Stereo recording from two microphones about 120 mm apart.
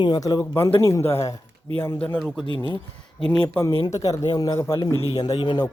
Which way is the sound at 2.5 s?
40° left (ahead or behind).